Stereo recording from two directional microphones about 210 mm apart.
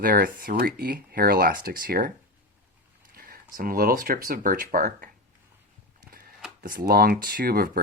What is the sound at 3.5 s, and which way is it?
Speech, 45° right (ahead or behind).